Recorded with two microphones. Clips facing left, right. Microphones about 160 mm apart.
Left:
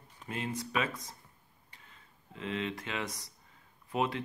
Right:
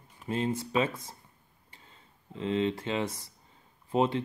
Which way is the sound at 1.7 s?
30° right (ahead or behind).